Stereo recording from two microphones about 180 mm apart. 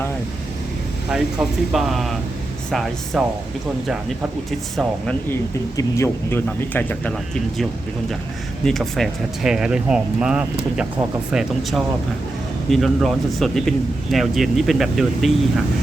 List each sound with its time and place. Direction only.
1.1 s speech: centre (ahead or behind)
5.7 s speech: 15° left (ahead or behind)
8.6 s speech: centre (ahead or behind)